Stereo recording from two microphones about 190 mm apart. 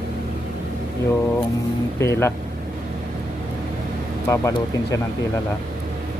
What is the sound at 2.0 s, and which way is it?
Speech, 15° left (ahead or behind).